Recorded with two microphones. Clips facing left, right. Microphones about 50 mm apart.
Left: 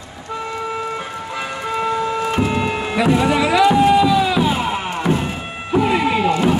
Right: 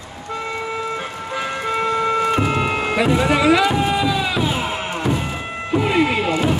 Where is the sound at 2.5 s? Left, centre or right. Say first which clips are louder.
Right 1 dB; centre.